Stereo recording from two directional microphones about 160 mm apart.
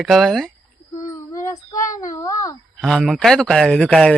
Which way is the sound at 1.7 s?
55° left (ahead or behind).